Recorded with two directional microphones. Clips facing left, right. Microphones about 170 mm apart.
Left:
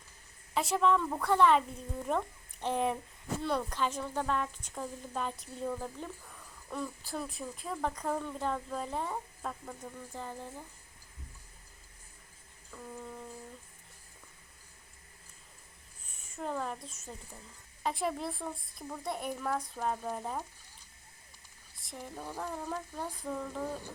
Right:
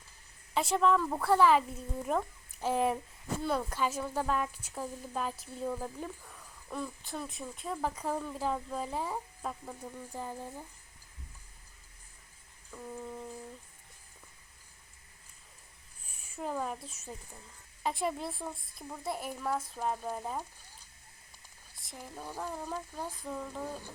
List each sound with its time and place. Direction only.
0.5 s a woman's voice: centre (ahead or behind)
12.7 s a sound: 10° right (ahead or behind)
16.0 s a woman's voice: 10° right (ahead or behind)
21.8 s a woman's voice: centre (ahead or behind)